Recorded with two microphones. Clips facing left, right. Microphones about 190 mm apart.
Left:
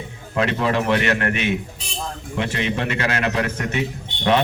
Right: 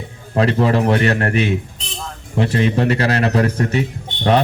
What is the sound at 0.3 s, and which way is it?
A man's voice, 35° right (ahead or behind).